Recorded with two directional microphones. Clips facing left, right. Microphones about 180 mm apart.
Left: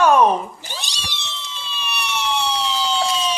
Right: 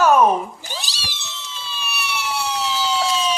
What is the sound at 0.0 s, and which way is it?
Cat, 5° right (ahead or behind).